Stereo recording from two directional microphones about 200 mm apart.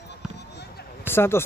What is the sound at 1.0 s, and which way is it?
Speech, 10° left (ahead or behind).